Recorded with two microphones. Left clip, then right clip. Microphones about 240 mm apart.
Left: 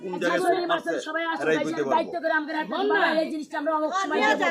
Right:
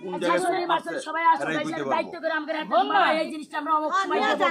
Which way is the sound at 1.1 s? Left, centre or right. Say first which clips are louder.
Right 5 dB; centre.